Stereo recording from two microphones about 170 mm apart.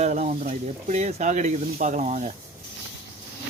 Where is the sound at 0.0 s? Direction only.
45° right (ahead or behind).